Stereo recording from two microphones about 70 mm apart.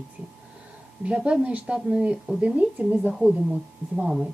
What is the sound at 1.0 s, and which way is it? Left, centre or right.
A woman's voice, centre.